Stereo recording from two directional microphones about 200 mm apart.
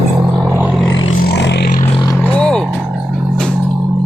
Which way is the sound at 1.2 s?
60° left (ahead or behind).